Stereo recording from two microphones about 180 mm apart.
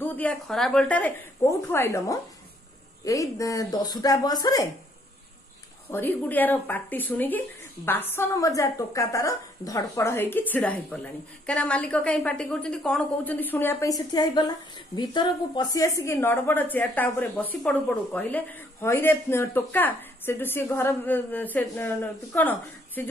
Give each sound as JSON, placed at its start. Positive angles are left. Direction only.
{"t": 0.0, "sound": "speech", "side_deg": 10}
{"t": 5.9, "sound": "speech", "side_deg": 10}